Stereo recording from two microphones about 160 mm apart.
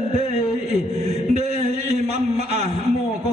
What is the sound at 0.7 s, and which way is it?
Mantra, 40° right (ahead or behind).